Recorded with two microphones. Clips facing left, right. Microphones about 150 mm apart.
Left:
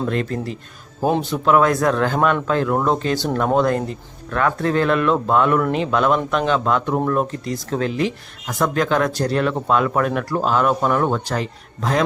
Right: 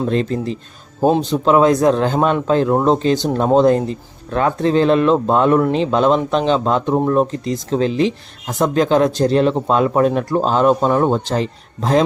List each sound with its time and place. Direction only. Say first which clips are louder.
0.1 s speech: right 4 dB; 25° right (ahead or behind)